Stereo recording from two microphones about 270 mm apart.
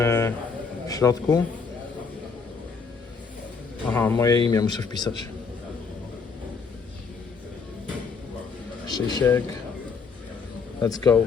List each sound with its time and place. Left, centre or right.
0.0 s speech: centre
3.8 s speech: centre
8.9 s speech: centre
10.8 s speech: centre